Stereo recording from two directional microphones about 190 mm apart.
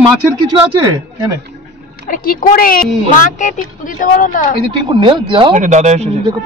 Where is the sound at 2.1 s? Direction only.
50° left (ahead or behind).